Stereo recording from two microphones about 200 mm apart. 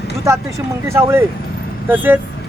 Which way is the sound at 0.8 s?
15° right (ahead or behind).